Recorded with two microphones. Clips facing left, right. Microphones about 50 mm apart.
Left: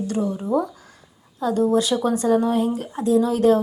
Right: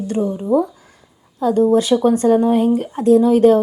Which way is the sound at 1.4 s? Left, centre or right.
Right.